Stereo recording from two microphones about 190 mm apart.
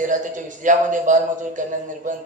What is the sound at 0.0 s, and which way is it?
A man's voice, 40° right (ahead or behind).